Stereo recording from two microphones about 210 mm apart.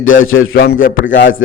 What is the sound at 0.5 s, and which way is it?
Speech, 45° left (ahead or behind).